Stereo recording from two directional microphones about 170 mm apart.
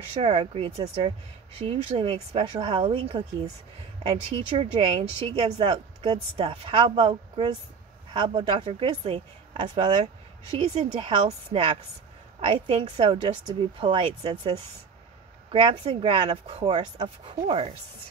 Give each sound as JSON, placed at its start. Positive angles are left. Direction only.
{"t": 0.1, "sound": "speech", "side_deg": -35}
{"t": 15.5, "sound": "speech", "side_deg": -30}